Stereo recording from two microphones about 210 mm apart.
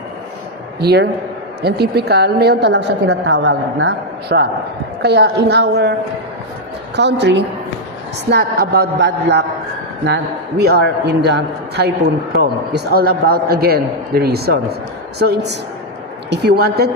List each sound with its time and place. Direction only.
0.8 s a woman's voice: 50° right (ahead or behind)
6.9 s a woman's voice: 55° right (ahead or behind)
10.6 s a woman's voice: 50° right (ahead or behind)